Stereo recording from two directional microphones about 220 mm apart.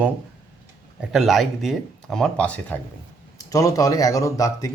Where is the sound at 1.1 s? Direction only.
Centre (ahead or behind); by 4.7 s 15° left (ahead or behind).